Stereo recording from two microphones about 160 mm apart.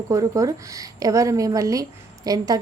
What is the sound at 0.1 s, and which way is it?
A woman's voice, 20° right (ahead or behind).